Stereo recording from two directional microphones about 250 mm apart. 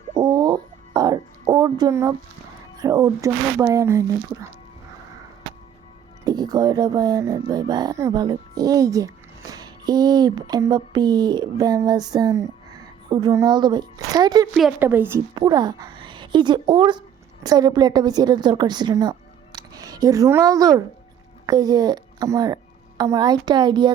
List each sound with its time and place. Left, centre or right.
0.1 s a sound: centre
2.7 s a woman's voice: centre
6.2 s speech: centre
14.5 s a woman's voice: centre